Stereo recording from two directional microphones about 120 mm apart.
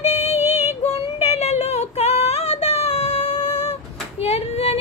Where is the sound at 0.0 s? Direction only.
65° left (ahead or behind).